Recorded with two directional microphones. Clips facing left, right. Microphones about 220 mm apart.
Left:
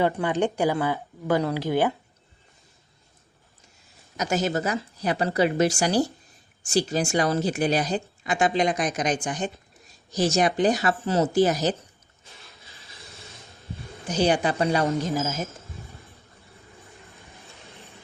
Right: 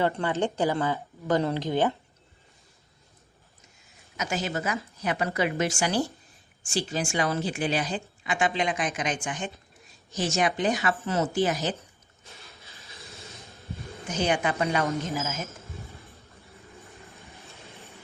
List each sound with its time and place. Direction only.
0.0 s speech: 15° left (ahead or behind)
4.2 s a woman's voice: 40° left (ahead or behind)
14.1 s a woman's voice: 35° left (ahead or behind)
17.2 s vehicle: centre (ahead or behind)